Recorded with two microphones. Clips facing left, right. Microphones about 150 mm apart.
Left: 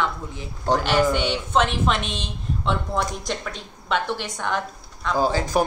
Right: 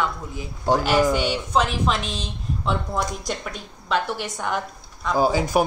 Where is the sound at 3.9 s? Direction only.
5° right (ahead or behind).